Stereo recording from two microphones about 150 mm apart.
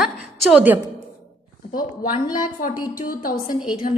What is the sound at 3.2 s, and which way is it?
Speech, 70° left (ahead or behind).